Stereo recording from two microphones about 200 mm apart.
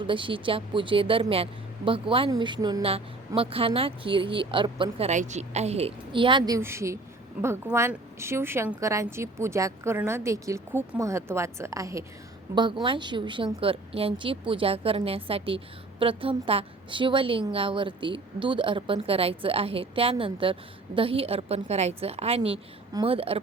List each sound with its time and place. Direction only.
0.0 s a woman's voice: 25° right (ahead or behind)